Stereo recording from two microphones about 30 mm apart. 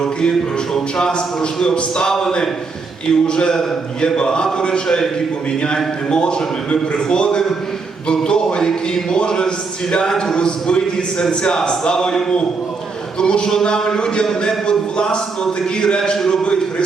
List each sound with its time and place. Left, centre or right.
0.0 s a man's voice: left
2.0 s a man's voice: centre
11.9 s a man's voice: centre
13.1 s a man's voice: left
16.0 s a man's voice: centre